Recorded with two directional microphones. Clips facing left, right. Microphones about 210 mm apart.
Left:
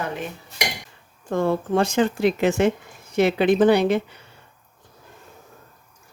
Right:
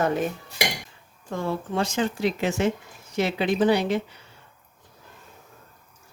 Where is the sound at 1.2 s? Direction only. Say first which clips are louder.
Left 7 dB; 55° left (ahead or behind).